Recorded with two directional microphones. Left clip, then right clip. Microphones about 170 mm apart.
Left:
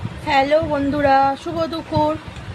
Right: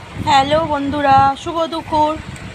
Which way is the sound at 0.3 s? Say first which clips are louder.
Right 3 dB; centre (ahead or behind).